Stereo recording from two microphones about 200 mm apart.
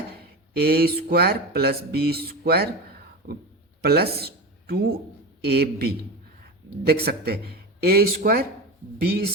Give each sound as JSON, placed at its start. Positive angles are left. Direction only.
{"t": 0.2, "sound": "speech", "side_deg": -50}